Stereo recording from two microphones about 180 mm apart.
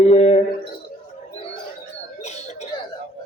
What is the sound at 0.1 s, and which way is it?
Speech, 35° left (ahead or behind).